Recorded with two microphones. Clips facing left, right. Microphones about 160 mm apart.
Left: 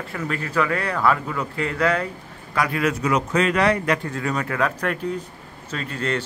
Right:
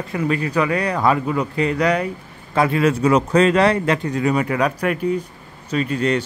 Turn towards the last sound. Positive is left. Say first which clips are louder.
# right 7 dB
turn(degrees=-15)  # may be behind; listen again after turning